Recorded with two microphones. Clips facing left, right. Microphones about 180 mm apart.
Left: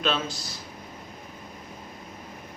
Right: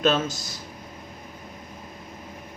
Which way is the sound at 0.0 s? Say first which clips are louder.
Right 5 dB; 45° right (ahead or behind).